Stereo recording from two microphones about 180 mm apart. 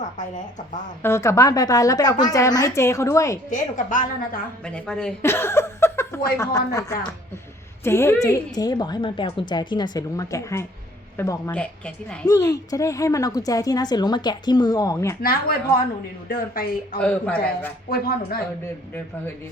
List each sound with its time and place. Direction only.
0.0 s speech: 45° left (ahead or behind)
1.0 s a woman's voice: 15° left (ahead or behind)
3.5 s a woman's voice: 45° left (ahead or behind)
4.6 s a woman's voice: 5° left (ahead or behind)
11.5 s a woman's voice: 5° left (ahead or behind)
12.3 s a woman's voice: 20° left (ahead or behind)
15.2 s a woman's voice: 55° left (ahead or behind)
17.0 s a woman's voice: 5° left (ahead or behind)
17.8 s speech: 55° left (ahead or behind)
18.6 s a woman's voice: 10° left (ahead or behind)